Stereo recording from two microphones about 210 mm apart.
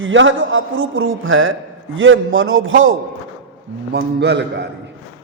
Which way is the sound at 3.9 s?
50° right (ahead or behind).